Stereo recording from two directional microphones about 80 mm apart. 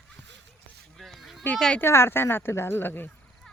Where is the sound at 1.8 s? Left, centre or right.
Left.